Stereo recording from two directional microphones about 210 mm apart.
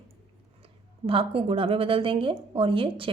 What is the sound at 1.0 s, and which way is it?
A woman's voice, 25° right (ahead or behind).